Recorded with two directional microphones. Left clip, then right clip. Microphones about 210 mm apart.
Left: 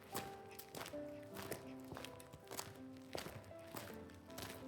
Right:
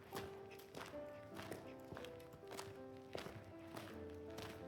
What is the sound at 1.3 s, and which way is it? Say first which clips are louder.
Music: left 2 dB; 40° left (ahead or behind).